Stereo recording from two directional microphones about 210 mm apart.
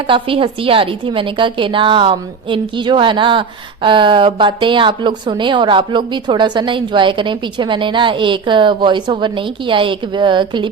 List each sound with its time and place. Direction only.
0.1 s a woman's voice: 25° right (ahead or behind)